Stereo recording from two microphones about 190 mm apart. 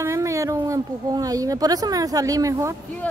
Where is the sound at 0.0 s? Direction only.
15° right (ahead or behind).